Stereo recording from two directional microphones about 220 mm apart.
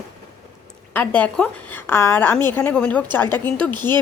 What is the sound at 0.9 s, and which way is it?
A woman's voice, 5° left (ahead or behind).